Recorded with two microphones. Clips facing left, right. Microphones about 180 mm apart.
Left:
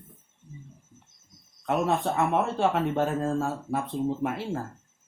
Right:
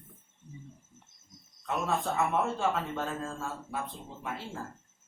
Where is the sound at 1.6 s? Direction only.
65° left (ahead or behind).